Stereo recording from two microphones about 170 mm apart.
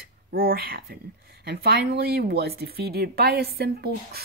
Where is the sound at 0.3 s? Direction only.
60° right (ahead or behind).